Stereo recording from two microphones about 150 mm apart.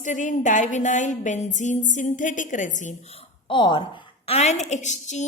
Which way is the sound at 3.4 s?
30° left (ahead or behind).